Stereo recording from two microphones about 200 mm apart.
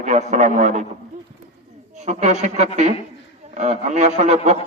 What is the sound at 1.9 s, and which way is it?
A man's voice, 35° right (ahead or behind).